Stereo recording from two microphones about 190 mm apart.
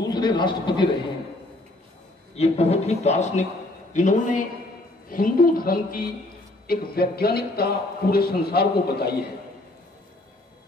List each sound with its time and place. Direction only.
0.1 s a man's voice: 25° left (ahead or behind)
2.3 s a man's voice: 35° left (ahead or behind); by 9.2 s 55° left (ahead or behind)